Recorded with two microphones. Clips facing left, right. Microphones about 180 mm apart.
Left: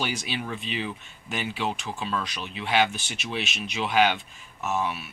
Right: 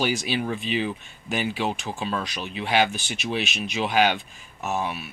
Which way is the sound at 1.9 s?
40° right (ahead or behind).